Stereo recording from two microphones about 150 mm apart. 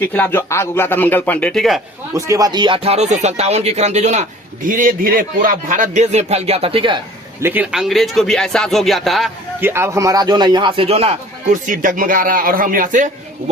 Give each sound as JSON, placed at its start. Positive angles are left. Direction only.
{"t": 0.0, "sound": "a man's voice", "side_deg": 10}
{"t": 2.1, "sound": "speech", "side_deg": -20}
{"t": 7.4, "sound": "speech", "side_deg": -10}
{"t": 9.6, "sound": "a man's voice", "side_deg": -15}
{"t": 11.5, "sound": "speech", "side_deg": -60}